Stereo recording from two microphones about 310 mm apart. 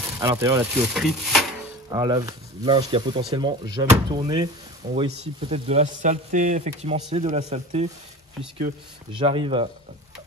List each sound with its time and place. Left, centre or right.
0.2 s speech: centre
1.9 s speech: centre